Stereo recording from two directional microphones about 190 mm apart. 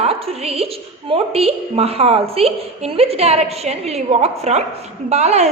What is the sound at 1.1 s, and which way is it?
A woman's voice, 30° right (ahead or behind).